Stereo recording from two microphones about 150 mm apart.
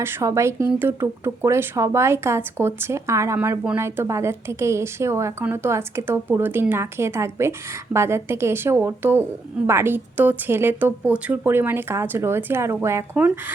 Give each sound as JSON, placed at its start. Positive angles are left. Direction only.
{"t": 0.0, "sound": "speech", "side_deg": -15}